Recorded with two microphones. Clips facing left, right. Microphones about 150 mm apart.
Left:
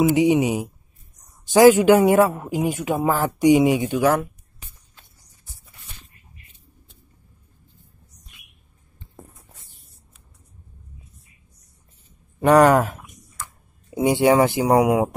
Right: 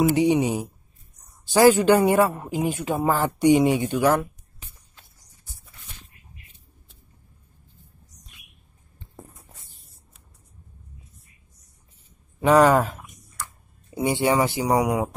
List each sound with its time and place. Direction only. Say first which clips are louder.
0.0 s speech: left 2 dB; 15° left (ahead or behind)
12.4 s speech: left 2 dB; centre (ahead or behind)
12.6 s speech: left 2 dB; 10° left (ahead or behind)
14.7 s speech: left 5 dB; 5° left (ahead or behind)